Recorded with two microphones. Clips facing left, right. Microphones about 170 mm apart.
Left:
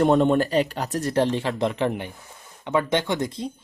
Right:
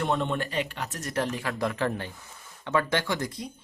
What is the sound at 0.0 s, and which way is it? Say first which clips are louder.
Speech: left 10 dB; 40° left (ahead or behind).